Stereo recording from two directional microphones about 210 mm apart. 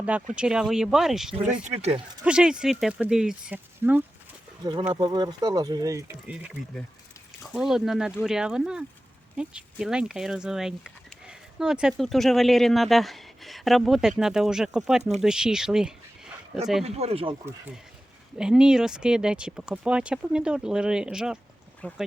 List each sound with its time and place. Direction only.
0.3 s speech: 5° right (ahead or behind)
1.6 s speech: 30° right (ahead or behind)
2.2 s speech: 5° right (ahead or behind)
4.6 s speech: 20° right (ahead or behind); by 16.3 s 5° right (ahead or behind)
16.8 s speech: 30° right (ahead or behind)
18.3 s speech: 5° right (ahead or behind)